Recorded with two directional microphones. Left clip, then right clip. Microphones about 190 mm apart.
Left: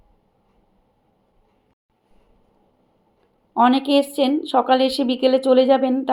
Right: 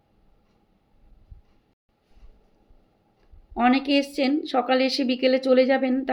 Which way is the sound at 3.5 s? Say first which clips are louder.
Left 5 dB; 10° left (ahead or behind).